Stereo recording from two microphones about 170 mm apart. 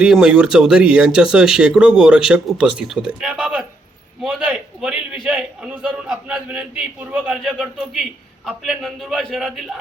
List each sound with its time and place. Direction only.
0.0 s a man's voice: 5° right (ahead or behind)